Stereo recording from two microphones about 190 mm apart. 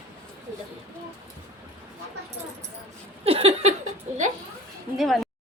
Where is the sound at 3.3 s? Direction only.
30° right (ahead or behind).